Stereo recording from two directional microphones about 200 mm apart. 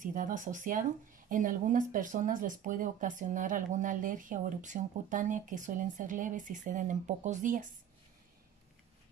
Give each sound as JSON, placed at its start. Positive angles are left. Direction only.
{"t": 0.0, "sound": "speech", "side_deg": -40}